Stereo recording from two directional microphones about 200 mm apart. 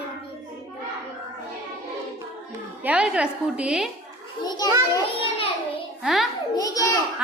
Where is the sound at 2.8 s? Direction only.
5° right (ahead or behind).